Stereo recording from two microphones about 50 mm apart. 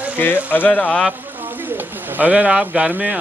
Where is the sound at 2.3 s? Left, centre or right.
Centre.